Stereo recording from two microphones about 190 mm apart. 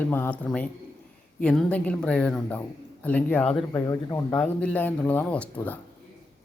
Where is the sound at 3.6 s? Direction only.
20° left (ahead or behind).